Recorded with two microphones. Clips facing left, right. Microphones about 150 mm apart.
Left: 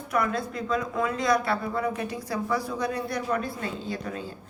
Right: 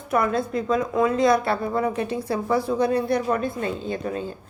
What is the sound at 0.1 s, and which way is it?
A woman's voice, 25° right (ahead or behind).